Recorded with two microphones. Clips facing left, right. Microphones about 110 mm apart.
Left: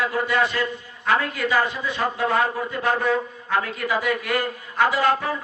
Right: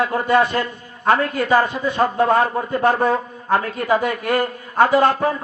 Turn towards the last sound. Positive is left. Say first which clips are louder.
# right 5 dB
turn(degrees=-45)  # may be behind; listen again after turning